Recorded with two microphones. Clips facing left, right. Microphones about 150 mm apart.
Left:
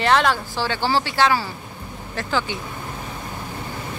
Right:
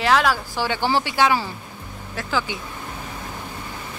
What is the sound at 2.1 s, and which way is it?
Speech, 5° right (ahead or behind).